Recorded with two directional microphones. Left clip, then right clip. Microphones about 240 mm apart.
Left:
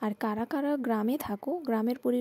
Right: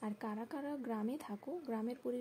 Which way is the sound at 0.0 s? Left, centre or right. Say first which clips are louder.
Left 12 dB; left.